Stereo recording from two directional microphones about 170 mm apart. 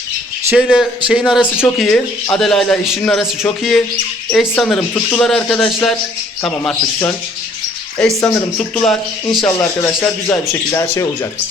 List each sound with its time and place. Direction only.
0.5 s speech: 5° right (ahead or behind)
7.9 s speech: 5° left (ahead or behind)
9.5 s speech: 15° left (ahead or behind)